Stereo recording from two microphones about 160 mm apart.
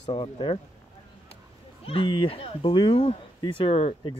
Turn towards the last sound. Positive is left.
turn(degrees=35)  # may be behind; listen again after turning